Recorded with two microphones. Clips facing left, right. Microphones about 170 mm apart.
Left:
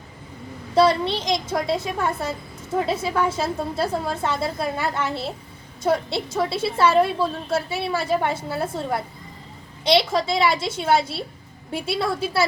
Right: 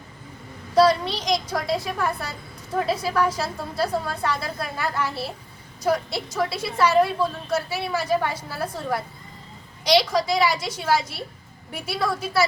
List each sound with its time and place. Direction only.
0.7 s a woman's voice: 25° left (ahead or behind)